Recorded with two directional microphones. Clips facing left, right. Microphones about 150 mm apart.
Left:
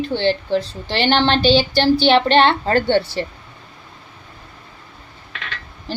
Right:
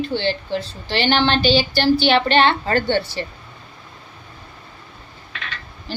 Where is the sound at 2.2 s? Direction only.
35° left (ahead or behind).